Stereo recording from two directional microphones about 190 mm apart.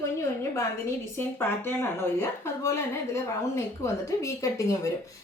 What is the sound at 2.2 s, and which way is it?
A woman's voice, 15° left (ahead or behind).